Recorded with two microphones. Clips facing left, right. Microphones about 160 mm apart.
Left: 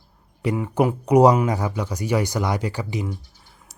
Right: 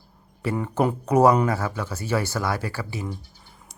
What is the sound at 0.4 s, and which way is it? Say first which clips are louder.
Speech: left 2 dB; 10° left (ahead or behind).